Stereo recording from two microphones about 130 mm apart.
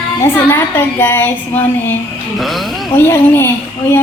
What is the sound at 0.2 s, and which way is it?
A woman's voice, 15° left (ahead or behind).